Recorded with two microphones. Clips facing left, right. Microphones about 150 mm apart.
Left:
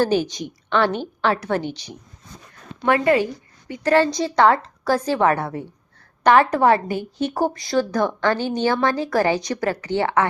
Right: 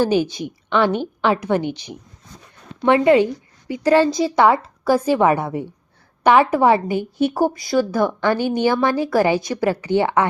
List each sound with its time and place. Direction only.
0.0 s a woman's voice: 10° right (ahead or behind)